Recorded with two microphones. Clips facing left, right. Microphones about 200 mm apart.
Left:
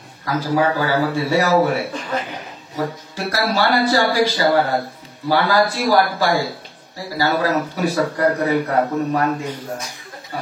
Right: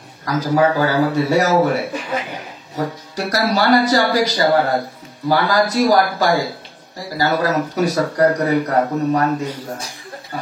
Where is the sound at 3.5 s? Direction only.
40° right (ahead or behind).